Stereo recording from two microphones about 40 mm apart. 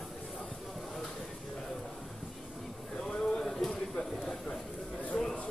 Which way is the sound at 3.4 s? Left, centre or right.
Centre.